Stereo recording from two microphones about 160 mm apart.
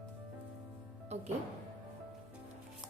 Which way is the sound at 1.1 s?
45° right (ahead or behind).